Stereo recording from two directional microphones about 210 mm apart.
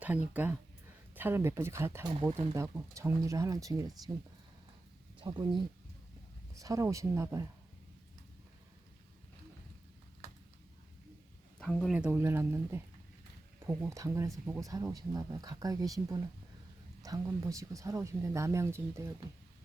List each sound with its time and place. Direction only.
0.0 s speech: 10° right (ahead or behind)
2.3 s speech: 25° right (ahead or behind)
2.6 s speech: 15° right (ahead or behind)
5.2 s speech: 20° right (ahead or behind)
11.6 s speech: centre (ahead or behind); by 15.9 s 15° right (ahead or behind)
17.0 s speech: 15° right (ahead or behind)